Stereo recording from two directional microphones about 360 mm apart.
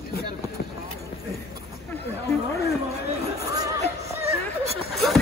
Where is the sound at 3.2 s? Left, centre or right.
Centre.